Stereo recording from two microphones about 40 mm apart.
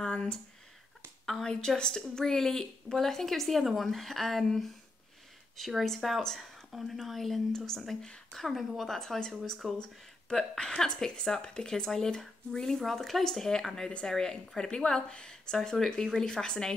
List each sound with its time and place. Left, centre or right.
0.0 s a sound: left
1.4 s a woman's voice: centre
5.9 s a woman's voice: centre
8.4 s speech: centre
8.8 s speech: centre
9.6 s speech: centre
10.6 s a woman's voice: centre